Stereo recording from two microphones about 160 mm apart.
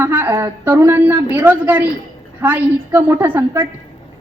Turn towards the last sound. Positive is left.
turn(degrees=-10)  # may be behind; listen again after turning